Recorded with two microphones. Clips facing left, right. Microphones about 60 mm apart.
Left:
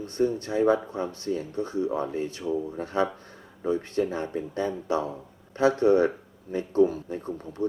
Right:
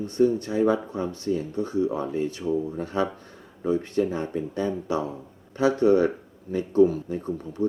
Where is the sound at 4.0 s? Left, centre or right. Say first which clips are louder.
Right 2 dB; left.